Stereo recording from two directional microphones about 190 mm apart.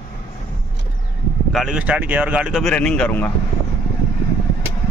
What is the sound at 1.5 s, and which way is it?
Speech, centre (ahead or behind).